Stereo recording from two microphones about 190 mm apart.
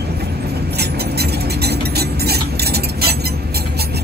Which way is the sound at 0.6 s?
60° right (ahead or behind).